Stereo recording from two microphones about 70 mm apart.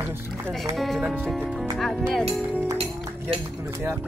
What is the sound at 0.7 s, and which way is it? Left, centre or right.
Speech, centre.